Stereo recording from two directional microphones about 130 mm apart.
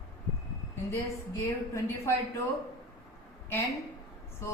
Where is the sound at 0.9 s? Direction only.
20° left (ahead or behind).